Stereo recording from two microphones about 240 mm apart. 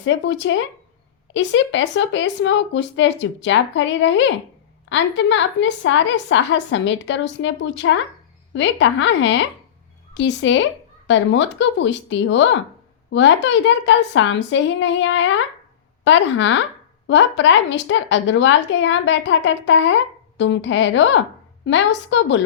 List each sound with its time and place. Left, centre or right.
0.0 s a woman's voice: left